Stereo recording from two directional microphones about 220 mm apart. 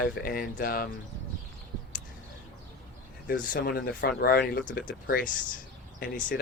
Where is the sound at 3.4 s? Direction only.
40° left (ahead or behind).